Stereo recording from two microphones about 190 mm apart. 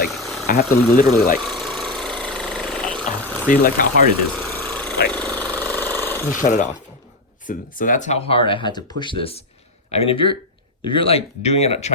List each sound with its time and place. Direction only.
0.2 s a sound: centre (ahead or behind)
0.4 s speech: 50° left (ahead or behind)
1.4 s engine: centre (ahead or behind)
2.0 s a sound: 5° left (ahead or behind)
3.5 s speech: 45° left (ahead or behind)
4.4 s engine: 5° left (ahead or behind)
5.1 s jackhammer: 10° left (ahead or behind)
6.4 s speech: 40° left (ahead or behind)